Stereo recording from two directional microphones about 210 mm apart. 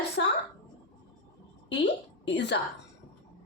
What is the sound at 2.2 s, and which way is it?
Speech, 55° left (ahead or behind).